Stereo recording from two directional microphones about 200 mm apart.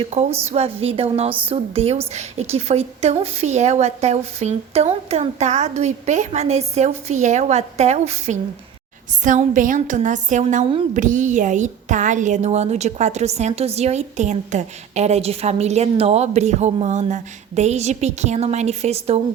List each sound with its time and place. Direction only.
0.0 s a woman's voice: 35° right (ahead or behind)
0.3 s a woman's voice: 10° right (ahead or behind)
0.5 s a woman's voice: 30° right (ahead or behind)